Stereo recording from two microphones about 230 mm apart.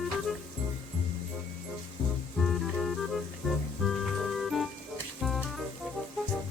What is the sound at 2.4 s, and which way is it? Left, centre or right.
Music, centre.